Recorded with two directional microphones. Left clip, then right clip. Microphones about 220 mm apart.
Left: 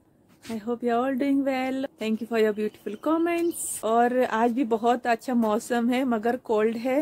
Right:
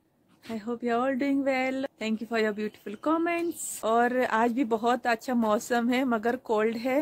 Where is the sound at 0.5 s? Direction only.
5° right (ahead or behind).